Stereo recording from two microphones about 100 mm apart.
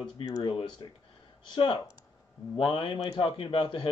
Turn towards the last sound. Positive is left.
turn(degrees=50)  # may be behind; listen again after turning